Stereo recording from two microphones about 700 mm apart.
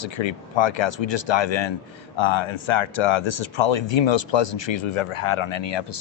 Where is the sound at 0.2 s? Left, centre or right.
Left.